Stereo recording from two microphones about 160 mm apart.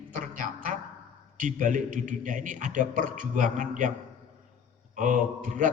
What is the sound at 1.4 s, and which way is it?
A man's voice, 55° right (ahead or behind).